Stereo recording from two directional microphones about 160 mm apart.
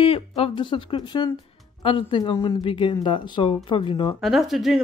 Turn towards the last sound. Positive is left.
turn(degrees=0)  # may be behind; listen again after turning